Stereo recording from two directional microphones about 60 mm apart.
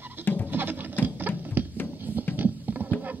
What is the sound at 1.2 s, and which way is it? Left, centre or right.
Music, right.